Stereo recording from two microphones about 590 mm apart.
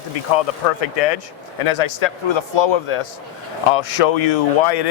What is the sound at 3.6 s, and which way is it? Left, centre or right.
Speech, left.